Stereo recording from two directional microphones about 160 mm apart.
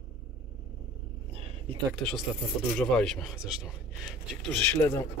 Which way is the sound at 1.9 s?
5° left (ahead or behind).